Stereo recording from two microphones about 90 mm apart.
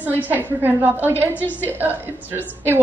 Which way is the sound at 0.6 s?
20° right (ahead or behind).